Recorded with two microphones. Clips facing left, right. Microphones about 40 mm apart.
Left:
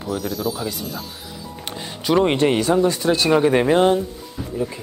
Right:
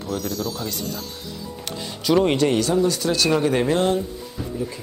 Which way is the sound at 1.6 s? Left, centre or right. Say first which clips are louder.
Even; centre.